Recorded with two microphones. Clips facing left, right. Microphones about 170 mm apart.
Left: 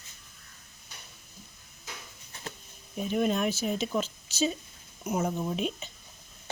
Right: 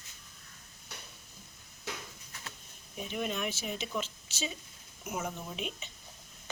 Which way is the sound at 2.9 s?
40° left (ahead or behind).